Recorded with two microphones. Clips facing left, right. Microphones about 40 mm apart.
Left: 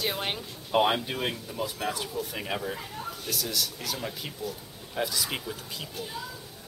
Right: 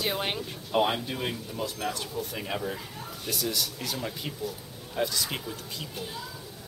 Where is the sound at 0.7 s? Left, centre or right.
Centre.